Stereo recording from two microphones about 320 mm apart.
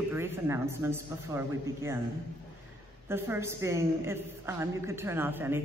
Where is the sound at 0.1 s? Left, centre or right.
Centre.